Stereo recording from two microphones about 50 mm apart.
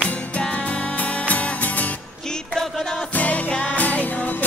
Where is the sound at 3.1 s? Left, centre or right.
Left.